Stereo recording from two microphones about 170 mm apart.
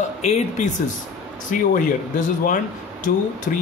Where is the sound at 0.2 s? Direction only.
40° left (ahead or behind).